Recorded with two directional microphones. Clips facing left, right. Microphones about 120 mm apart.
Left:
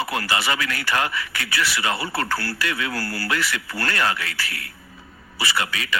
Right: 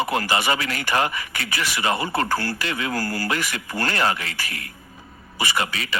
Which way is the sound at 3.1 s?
45° right (ahead or behind).